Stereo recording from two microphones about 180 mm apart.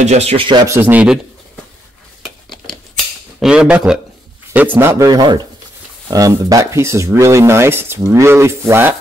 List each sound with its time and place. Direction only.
0.0 s speech: 35° right (ahead or behind)
0.7 s speech: 10° right (ahead or behind)
3.3 s speech: 5° right (ahead or behind)